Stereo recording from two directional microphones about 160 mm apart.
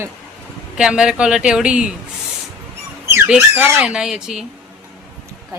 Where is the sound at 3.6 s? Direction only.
5° right (ahead or behind).